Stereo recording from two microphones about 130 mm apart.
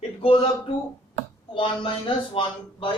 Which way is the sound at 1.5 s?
45° left (ahead or behind).